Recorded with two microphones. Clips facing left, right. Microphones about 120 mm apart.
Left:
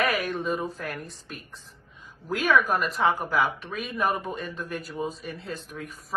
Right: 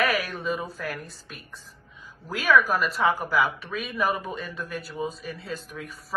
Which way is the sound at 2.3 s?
Centre (ahead or behind).